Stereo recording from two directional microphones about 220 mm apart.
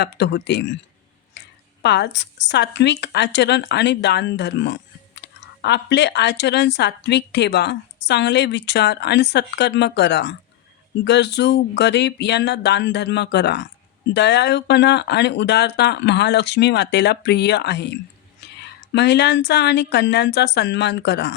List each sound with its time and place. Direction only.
0.0 s speech: 50° left (ahead or behind)
1.8 s speech: 50° left (ahead or behind)